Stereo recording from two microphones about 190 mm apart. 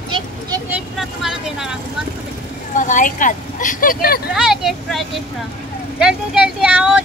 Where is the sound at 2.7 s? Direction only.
40° left (ahead or behind).